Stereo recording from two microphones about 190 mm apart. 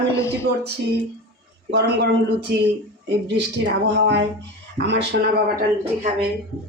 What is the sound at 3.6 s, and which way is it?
A man's voice, 65° right (ahead or behind).